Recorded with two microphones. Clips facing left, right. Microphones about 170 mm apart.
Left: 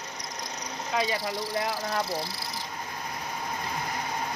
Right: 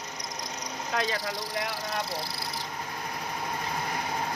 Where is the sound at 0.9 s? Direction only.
5° left (ahead or behind).